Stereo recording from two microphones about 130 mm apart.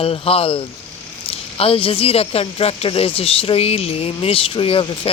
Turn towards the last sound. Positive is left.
turn(degrees=45)  # may be behind; listen again after turning